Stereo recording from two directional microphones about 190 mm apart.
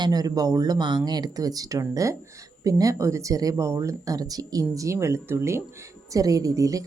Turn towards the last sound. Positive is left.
turn(degrees=-20)  # may be behind; listen again after turning